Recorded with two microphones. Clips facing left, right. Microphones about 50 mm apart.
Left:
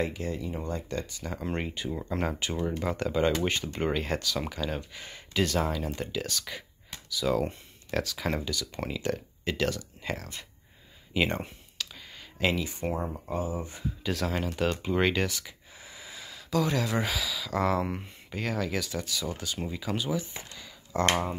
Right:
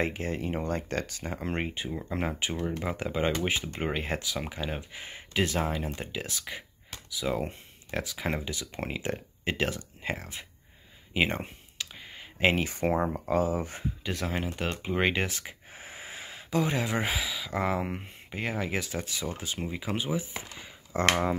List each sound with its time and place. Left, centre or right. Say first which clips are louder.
0.0 s speech: right 1 dB; right
1.2 s speech: right 1 dB; right
1.9 s speech: left 1 dB; centre
5.9 s speech: left 3 dB; centre
11.9 s clicking: right 1 dB; right
12.5 s speech: right 4 dB; right
13.3 s speech: right 5 dB; right
14.0 s speech: left 3 dB; centre
15.2 s speech: left 2 dB; right
20.5 s a sound: left 2 dB; right